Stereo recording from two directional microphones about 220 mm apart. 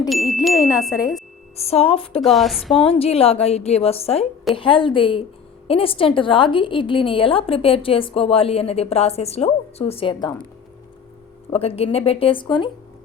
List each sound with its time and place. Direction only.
0.1 s speech: centre (ahead or behind)
0.9 s speech: 15° left (ahead or behind)
1.5 s a woman's voice: 25° left (ahead or behind)
2.2 s speech: centre (ahead or behind)
2.8 s a woman's voice: 25° left (ahead or behind)
11.5 s a woman's voice: 25° left (ahead or behind)